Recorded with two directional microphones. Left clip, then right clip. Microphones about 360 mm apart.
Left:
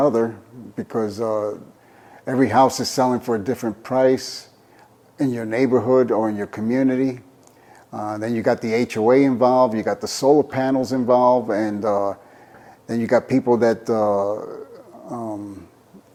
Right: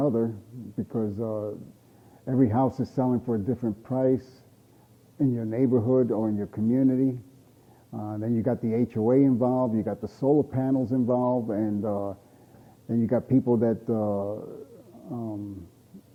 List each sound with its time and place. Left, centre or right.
0.0 s speech: centre